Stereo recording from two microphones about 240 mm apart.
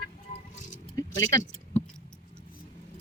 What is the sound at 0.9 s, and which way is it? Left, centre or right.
Keys jangling, centre.